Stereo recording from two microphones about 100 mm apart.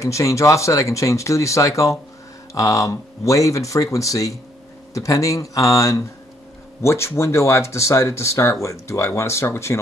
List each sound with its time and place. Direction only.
0.0 s speech: 30° left (ahead or behind)